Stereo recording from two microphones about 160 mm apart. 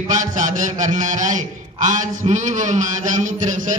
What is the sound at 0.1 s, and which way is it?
A man's voice, 50° right (ahead or behind).